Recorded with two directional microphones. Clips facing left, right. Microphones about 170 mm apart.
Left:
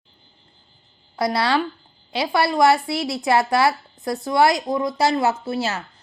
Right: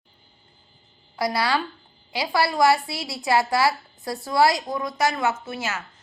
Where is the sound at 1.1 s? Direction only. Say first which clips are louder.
Left 3 dB; 25° left (ahead or behind).